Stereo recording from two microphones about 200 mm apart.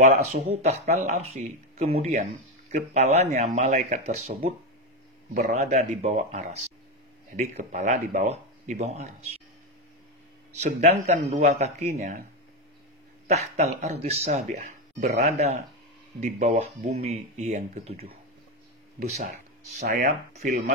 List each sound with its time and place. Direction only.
0.0 s speech: 35° right (ahead or behind)
7.7 s speech: 35° right (ahead or behind)
10.6 s speech: 35° right (ahead or behind)
13.3 s speech: 35° right (ahead or behind)
19.9 s speech: 40° right (ahead or behind)